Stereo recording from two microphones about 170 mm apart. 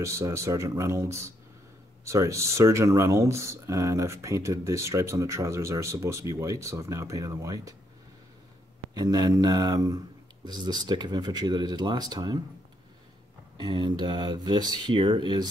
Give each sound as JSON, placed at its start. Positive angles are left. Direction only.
{"t": 0.0, "sound": "speech", "side_deg": -15}
{"t": 8.9, "sound": "speech", "side_deg": -20}
{"t": 13.6, "sound": "speech", "side_deg": -25}